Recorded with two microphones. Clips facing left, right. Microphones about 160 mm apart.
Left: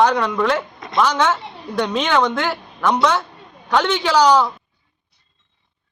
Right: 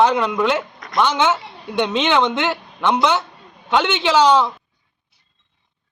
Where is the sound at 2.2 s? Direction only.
25° right (ahead or behind).